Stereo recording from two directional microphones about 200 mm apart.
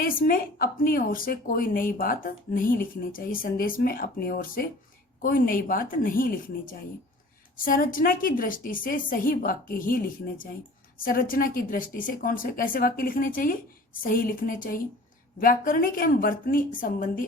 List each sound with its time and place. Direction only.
0.0 s speech: 45° left (ahead or behind)